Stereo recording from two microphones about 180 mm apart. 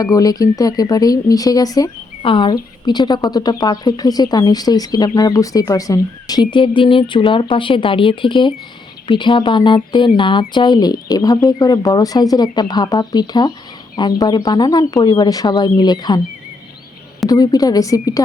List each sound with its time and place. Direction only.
0.0 s speech: 20° left (ahead or behind)
17.2 s speech: 20° left (ahead or behind)